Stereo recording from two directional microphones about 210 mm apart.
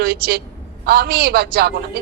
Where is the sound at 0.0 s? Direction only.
45° right (ahead or behind).